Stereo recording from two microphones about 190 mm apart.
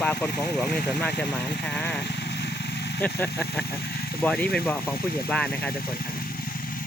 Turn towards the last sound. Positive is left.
turn(degrees=5)  # may be behind; listen again after turning